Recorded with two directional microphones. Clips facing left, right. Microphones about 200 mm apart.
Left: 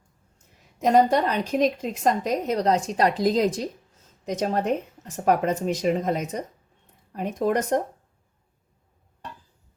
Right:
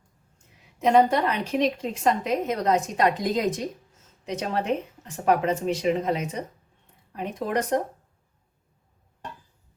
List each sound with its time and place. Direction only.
0.8 s a woman's voice: 40° left (ahead or behind)